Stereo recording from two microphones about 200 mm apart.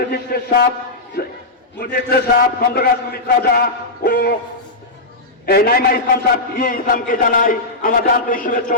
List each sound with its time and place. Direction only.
0.1 s a man's voice: 50° left (ahead or behind)
5.5 s a man's voice: 50° left (ahead or behind)